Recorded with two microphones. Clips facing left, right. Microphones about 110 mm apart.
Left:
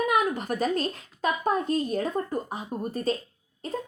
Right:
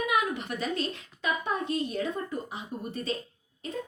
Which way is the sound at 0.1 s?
40° left (ahead or behind).